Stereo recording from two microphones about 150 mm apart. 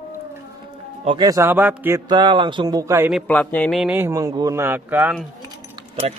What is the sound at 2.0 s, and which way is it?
Speech, 30° right (ahead or behind).